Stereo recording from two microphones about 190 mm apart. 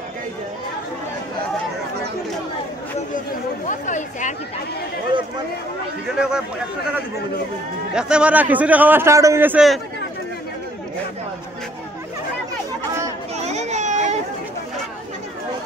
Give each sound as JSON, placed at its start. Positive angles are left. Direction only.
{"t": 3.6, "sound": "speech", "side_deg": 40}
{"t": 6.1, "sound": "speech", "side_deg": -5}
{"t": 7.9, "sound": "a man's voice", "side_deg": -5}
{"t": 13.5, "sound": "children playing", "side_deg": -35}